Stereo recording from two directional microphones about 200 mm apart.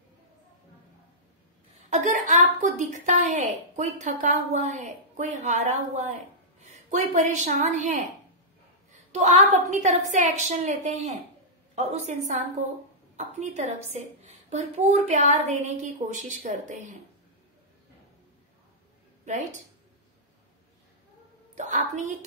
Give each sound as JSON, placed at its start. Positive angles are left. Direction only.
{"t": 1.9, "sound": "a woman's voice", "side_deg": -40}
{"t": 9.1, "sound": "a woman's voice", "side_deg": -35}
{"t": 21.5, "sound": "a woman's voice", "side_deg": -40}